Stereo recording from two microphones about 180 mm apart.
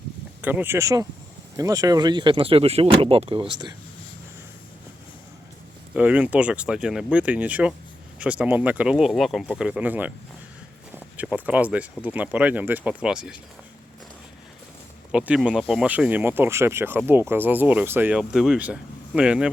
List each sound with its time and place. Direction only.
0.4 s speech: 10° right (ahead or behind); by 3.8 s 25° right (ahead or behind)
5.9 s speech: 5° right (ahead or behind)
15.1 s speech: 5° right (ahead or behind)